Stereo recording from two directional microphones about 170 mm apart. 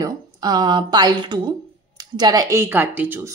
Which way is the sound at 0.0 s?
25° right (ahead or behind).